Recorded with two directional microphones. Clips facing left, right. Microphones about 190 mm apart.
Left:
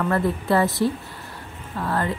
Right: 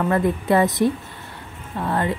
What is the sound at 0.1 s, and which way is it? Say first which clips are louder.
A woman's voice: right 2 dB; 20° right (ahead or behind).